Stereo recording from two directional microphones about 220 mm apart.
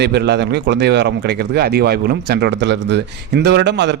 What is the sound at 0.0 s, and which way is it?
Speech, 50° right (ahead or behind).